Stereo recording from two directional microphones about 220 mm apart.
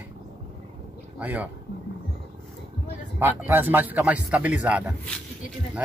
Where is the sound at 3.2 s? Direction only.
10° right (ahead or behind).